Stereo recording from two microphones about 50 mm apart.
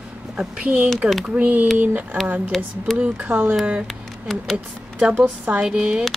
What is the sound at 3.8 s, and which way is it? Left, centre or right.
Speech, centre.